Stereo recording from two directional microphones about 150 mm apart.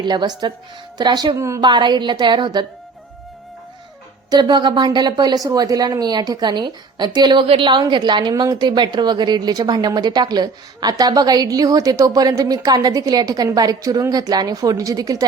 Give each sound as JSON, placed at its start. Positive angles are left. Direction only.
{"t": 0.0, "sound": "speech", "side_deg": -30}
{"t": 4.3, "sound": "speech", "side_deg": -30}